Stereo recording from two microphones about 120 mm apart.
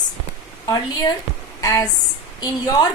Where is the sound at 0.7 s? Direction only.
30° left (ahead or behind).